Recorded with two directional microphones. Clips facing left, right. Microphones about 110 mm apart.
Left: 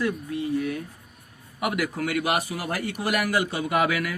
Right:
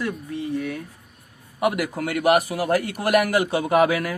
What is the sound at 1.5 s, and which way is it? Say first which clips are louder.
A man's voice: right 4 dB; 40° right (ahead or behind).